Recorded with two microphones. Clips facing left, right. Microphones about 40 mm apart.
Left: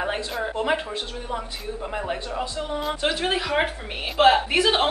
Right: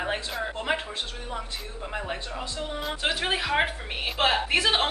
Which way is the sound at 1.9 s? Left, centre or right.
Centre.